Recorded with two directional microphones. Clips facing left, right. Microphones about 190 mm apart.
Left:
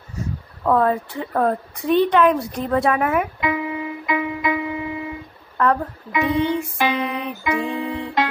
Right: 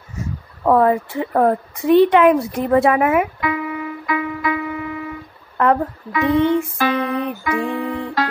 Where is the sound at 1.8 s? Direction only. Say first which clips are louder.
Right 6 dB; 60° right (ahead or behind).